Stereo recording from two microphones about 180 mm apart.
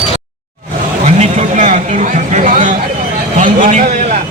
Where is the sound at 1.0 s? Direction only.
40° right (ahead or behind).